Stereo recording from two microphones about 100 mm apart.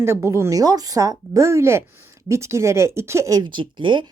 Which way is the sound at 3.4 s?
50° right (ahead or behind).